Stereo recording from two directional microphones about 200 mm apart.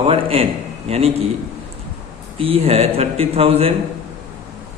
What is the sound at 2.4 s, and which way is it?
A man's voice, 30° right (ahead or behind).